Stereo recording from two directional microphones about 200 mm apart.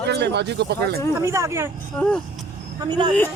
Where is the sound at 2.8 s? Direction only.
20° right (ahead or behind).